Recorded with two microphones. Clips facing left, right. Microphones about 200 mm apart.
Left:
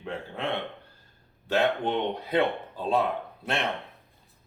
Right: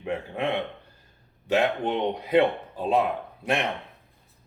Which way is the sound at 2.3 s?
15° right (ahead or behind).